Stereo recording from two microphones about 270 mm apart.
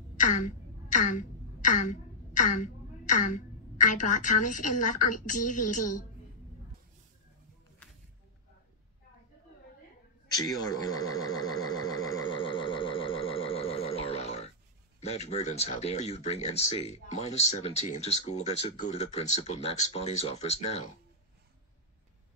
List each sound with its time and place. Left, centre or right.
0.2 s throat clearing: left
10.3 s a sound: centre
15.0 s speech: left